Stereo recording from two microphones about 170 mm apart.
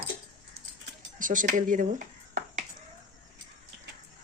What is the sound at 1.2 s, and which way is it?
Speech, 50° right (ahead or behind).